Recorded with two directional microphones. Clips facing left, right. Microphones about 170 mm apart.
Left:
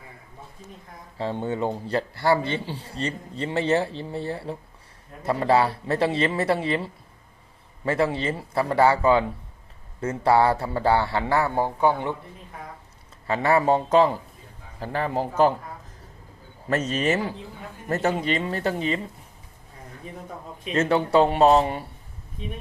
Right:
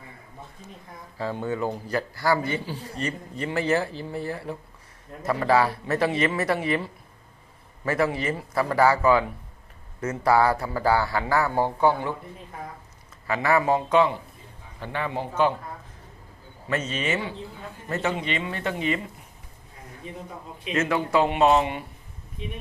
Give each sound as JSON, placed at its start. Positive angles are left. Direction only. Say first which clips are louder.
{"t": 1.2, "sound": "a man's voice", "louder": "left 1 dB", "side_deg": 25}
{"t": 13.2, "sound": "speech", "louder": "left 2 dB", "side_deg": 30}
{"t": 16.6, "sound": "speech", "louder": "left 4 dB", "side_deg": 40}
{"t": 20.0, "sound": "a man's voice", "louder": "right 1 dB", "side_deg": 45}
{"t": 20.7, "sound": "speech", "louder": "left 3 dB", "side_deg": 30}